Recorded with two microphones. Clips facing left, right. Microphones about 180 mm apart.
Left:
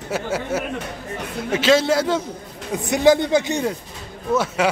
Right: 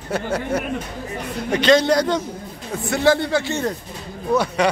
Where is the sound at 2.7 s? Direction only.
15° left (ahead or behind).